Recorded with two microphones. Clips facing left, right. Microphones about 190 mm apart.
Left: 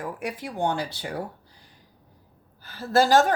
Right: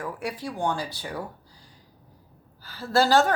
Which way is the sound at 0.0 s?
15° left (ahead or behind).